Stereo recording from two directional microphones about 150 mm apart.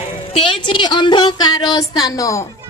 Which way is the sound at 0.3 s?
35° left (ahead or behind).